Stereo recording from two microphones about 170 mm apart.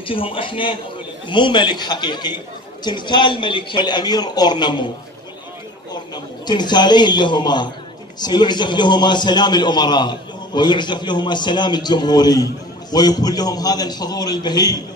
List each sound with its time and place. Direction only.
0.0 s a man's voice: 30° left (ahead or behind)
6.1 s a man's voice: 25° left (ahead or behind)